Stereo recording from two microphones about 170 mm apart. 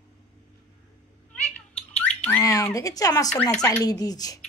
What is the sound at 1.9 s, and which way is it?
A child's voice, 10° left (ahead or behind).